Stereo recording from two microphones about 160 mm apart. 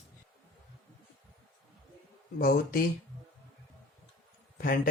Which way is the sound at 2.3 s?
65° left (ahead or behind).